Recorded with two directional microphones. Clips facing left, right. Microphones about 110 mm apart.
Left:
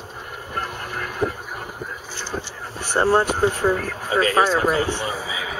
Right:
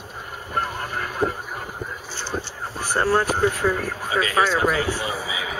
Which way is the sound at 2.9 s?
25° left (ahead or behind).